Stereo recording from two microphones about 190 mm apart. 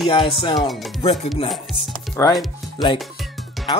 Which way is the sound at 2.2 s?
15° left (ahead or behind).